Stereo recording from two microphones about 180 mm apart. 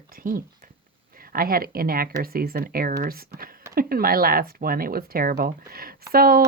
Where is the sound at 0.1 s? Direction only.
50° right (ahead or behind).